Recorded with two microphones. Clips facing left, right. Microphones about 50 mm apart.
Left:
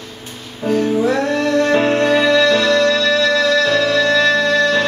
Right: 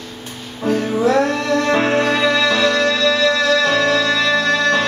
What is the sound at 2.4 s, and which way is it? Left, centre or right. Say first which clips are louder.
Music: left 2 dB; centre.